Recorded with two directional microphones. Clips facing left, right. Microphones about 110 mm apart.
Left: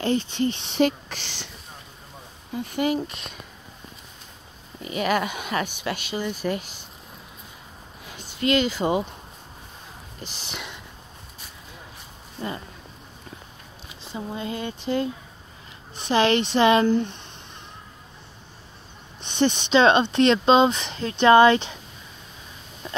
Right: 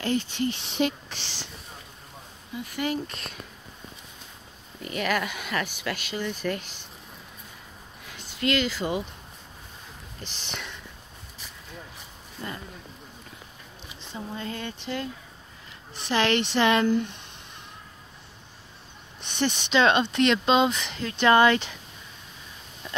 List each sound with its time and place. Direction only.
0.0 s speech: 25° left (ahead or behind)
0.7 s speech: 45° left (ahead or behind)
2.7 s speech: 20° left (ahead or behind)
4.8 s speech: 20° left (ahead or behind)
8.1 s speech: 20° left (ahead or behind)
10.4 s speech: 10° left (ahead or behind)
14.1 s speech: 15° left (ahead or behind); by 17.1 s 30° left (ahead or behind)
19.2 s speech: 20° left (ahead or behind)